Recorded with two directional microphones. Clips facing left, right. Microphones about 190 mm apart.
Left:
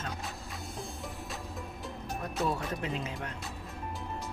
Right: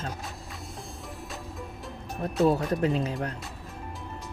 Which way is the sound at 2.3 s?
35° right (ahead or behind).